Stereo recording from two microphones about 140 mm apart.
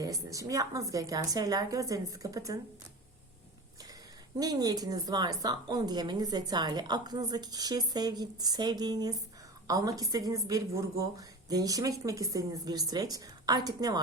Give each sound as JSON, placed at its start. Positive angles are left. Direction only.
{"t": 0.0, "sound": "a woman's voice", "side_deg": -25}
{"t": 4.4, "sound": "a woman's voice", "side_deg": -25}